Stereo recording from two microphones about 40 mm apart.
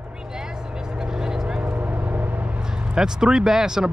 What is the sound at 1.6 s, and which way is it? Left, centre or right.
Vehicle, right.